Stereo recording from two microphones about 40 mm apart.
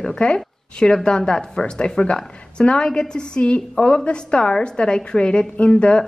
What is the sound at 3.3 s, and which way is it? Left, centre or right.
Speech, left.